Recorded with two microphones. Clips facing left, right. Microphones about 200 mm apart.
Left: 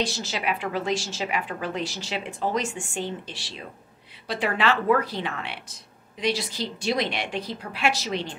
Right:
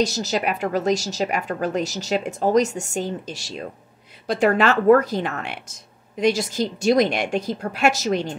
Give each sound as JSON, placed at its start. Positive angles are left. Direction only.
{"t": 0.0, "sound": "a woman's voice", "side_deg": -40}